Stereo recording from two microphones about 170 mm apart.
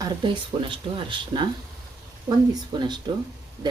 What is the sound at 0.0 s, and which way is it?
Speech, 30° right (ahead or behind).